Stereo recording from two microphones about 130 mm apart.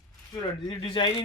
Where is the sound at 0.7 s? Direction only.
35° left (ahead or behind).